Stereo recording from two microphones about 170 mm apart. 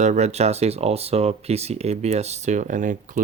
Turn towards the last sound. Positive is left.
turn(degrees=-45)  # may be behind; listen again after turning